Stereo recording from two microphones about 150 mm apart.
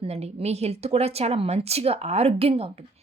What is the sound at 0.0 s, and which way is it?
A woman's voice, 40° right (ahead or behind).